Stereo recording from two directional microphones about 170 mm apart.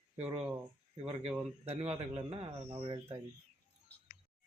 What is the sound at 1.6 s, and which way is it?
Speech, 40° right (ahead or behind).